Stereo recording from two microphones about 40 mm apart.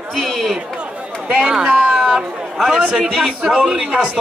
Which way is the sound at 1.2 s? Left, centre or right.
Right.